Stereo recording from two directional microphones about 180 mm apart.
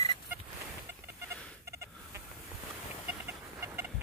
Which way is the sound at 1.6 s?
15° right (ahead or behind).